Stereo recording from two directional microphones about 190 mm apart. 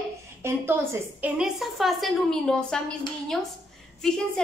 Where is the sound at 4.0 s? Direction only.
5° left (ahead or behind).